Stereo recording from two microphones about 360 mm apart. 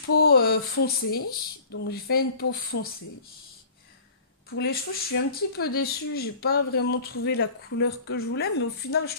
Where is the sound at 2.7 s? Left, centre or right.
Left.